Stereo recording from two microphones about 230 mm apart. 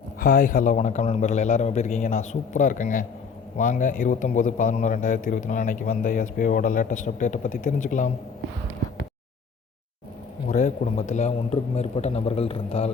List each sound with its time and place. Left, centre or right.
0.2 s speech: left
10.5 s a man's voice: left